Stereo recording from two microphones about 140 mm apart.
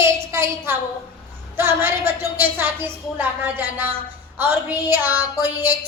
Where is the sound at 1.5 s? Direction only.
15° right (ahead or behind).